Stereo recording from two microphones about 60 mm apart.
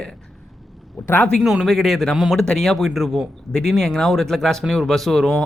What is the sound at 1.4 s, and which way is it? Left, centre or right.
Speech, centre.